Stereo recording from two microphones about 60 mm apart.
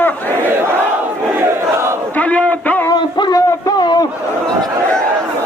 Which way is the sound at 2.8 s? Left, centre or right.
Left.